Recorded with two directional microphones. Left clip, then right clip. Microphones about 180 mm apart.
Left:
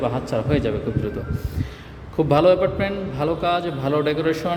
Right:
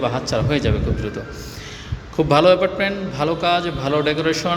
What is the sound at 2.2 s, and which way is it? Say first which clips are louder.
A man's voice: right 2 dB; 10° left (ahead or behind).